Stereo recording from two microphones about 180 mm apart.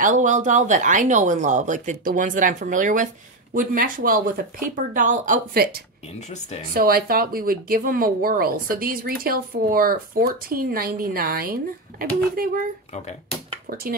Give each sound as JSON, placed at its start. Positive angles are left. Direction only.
{"t": 0.0, "sound": "speech", "side_deg": -45}
{"t": 6.1, "sound": "speech", "side_deg": 40}
{"t": 6.7, "sound": "speech", "side_deg": -55}